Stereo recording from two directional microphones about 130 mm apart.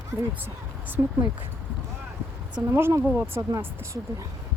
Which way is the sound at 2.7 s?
20° right (ahead or behind).